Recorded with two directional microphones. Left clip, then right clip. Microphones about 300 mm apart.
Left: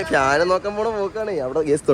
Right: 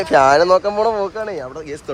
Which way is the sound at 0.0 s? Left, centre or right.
Centre.